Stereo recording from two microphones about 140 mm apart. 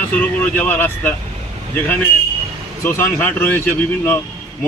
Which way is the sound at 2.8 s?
20° left (ahead or behind).